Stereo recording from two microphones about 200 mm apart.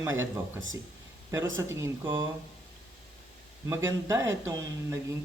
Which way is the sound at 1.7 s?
15° right (ahead or behind).